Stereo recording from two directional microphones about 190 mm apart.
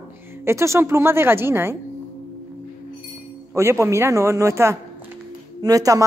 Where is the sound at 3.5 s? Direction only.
15° right (ahead or behind).